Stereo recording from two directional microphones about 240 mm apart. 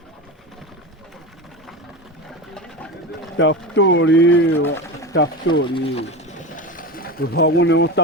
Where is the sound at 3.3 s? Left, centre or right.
Left.